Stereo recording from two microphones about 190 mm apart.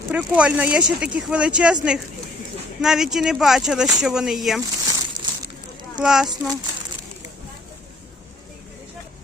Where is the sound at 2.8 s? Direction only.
Centre (ahead or behind).